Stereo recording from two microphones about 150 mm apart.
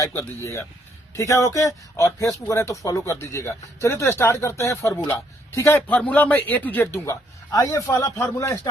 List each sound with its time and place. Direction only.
0.0 s speech: 20° left (ahead or behind)